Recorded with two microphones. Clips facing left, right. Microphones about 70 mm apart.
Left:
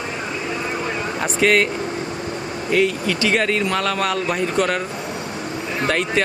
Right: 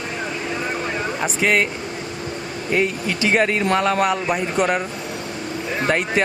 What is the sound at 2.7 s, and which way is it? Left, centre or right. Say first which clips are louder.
Speech: left 2 dB; right.